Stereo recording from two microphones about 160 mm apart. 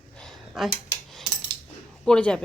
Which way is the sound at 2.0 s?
5° left (ahead or behind).